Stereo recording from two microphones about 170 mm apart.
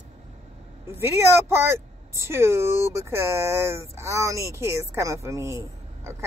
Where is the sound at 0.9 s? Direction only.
15° right (ahead or behind).